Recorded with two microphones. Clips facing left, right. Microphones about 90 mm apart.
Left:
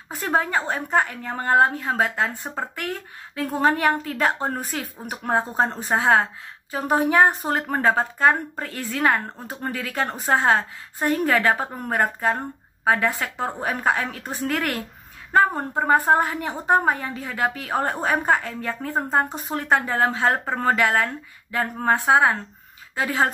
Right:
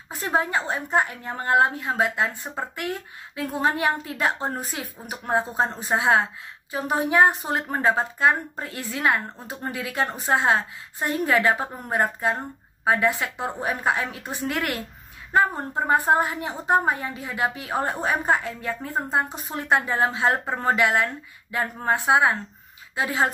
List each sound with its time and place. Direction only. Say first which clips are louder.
0.1 s a woman's voice: left 1 dB; 45° left (ahead or behind)
15.8 s a woman's voice: left 2 dB; 45° left (ahead or behind)